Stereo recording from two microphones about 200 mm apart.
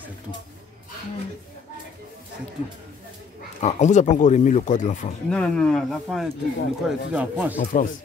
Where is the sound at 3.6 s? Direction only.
35° left (ahead or behind).